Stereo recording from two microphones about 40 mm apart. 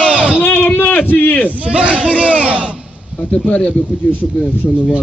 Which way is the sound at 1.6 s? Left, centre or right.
Right.